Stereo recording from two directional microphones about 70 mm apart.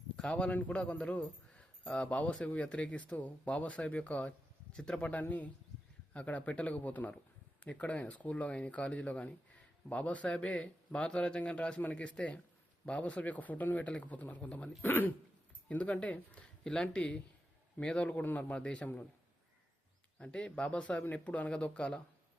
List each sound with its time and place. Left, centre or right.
0.2 s a man's voice: centre
20.1 s a man's voice: centre